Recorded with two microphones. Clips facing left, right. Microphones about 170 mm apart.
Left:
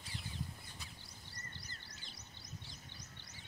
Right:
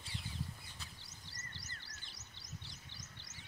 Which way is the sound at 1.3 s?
90° right.